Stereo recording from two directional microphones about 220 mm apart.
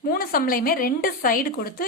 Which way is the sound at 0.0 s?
40° left (ahead or behind).